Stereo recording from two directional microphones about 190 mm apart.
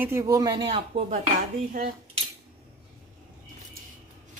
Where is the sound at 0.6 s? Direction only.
30° right (ahead or behind).